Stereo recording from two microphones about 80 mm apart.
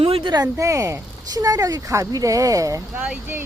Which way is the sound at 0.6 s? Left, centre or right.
Right.